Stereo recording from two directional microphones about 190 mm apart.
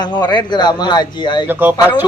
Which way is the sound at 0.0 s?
25° left (ahead or behind).